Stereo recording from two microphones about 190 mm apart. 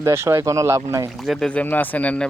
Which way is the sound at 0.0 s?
15° right (ahead or behind).